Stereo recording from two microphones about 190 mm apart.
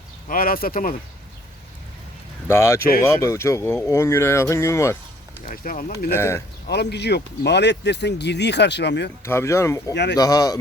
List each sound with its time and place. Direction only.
0.3 s speech: 50° left (ahead or behind)
2.5 s speech: 15° left (ahead or behind)
5.5 s speech: 45° left (ahead or behind)
6.1 s speech: 15° left (ahead or behind)
6.7 s speech: 60° left (ahead or behind)
9.2 s speech: 15° left (ahead or behind)
9.9 s speech: 65° left (ahead or behind)
10.2 s speech: 20° left (ahead or behind)